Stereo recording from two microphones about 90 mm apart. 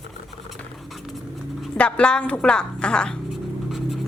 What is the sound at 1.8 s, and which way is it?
A woman's voice, 15° left (ahead or behind).